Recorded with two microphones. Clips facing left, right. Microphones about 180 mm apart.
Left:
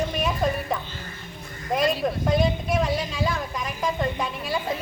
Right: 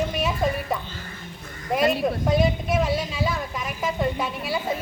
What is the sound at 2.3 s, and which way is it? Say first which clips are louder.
A woman's voice: even; 5° right (ahead or behind).